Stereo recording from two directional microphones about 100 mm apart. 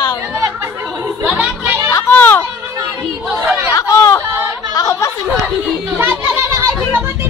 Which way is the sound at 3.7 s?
30° left (ahead or behind).